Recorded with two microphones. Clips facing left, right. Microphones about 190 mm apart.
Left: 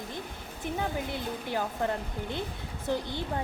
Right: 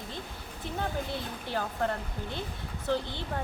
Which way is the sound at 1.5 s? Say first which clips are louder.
Even; 15° left (ahead or behind).